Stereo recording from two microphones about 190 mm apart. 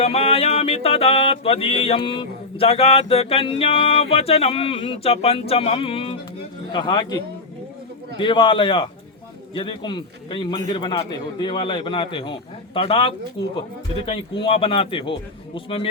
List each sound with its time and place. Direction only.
0.0 s mantra: 30° left (ahead or behind)
6.7 s a man's voice: 25° left (ahead or behind)
8.2 s a man's voice: 25° left (ahead or behind)